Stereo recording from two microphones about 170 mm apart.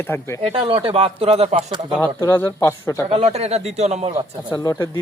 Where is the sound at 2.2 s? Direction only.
15° left (ahead or behind).